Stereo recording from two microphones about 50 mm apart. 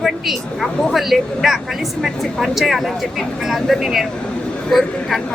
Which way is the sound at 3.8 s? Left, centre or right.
Centre.